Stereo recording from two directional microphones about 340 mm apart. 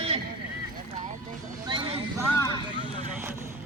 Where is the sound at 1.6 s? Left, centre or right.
Centre.